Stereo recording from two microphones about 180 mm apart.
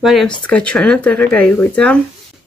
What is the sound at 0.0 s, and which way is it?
Speech, centre (ahead or behind).